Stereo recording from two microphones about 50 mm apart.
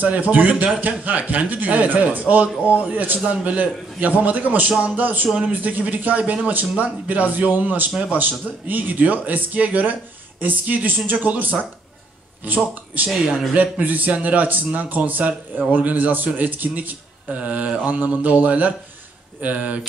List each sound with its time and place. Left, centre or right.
0.0 s speech: right
17.3 s mantra: right